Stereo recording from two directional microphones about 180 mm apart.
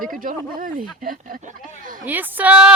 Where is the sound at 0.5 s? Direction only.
50° right (ahead or behind).